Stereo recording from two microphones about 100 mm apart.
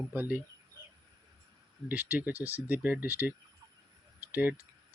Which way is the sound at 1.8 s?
20° right (ahead or behind).